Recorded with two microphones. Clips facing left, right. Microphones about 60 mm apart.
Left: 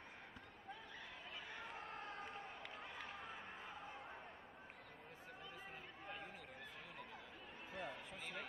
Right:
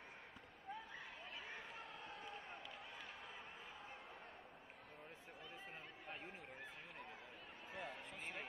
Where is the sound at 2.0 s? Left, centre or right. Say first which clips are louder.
Left 3 dB; left.